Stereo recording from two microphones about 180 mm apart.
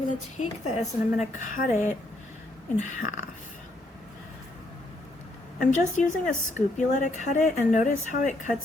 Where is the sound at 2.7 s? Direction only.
40° left (ahead or behind).